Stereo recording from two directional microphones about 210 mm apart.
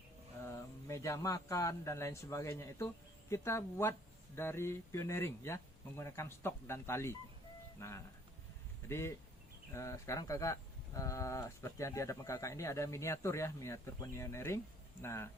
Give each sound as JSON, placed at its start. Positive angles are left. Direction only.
{"t": 0.4, "sound": "speech", "side_deg": 15}